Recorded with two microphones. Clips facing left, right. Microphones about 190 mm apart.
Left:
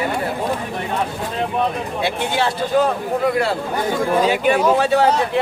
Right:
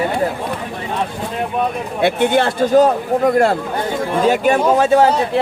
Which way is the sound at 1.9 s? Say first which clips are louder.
Right 8 dB; 55° right (ahead or behind).